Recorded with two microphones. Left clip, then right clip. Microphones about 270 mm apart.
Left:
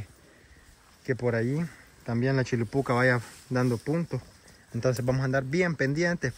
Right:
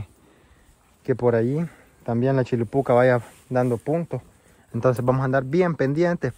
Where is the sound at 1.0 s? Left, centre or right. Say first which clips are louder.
Right 8 dB; right.